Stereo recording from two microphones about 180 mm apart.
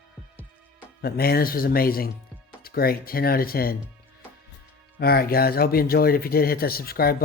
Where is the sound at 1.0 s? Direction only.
55° left (ahead or behind).